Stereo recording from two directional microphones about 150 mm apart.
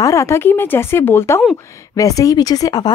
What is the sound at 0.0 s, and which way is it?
Speech, 20° left (ahead or behind).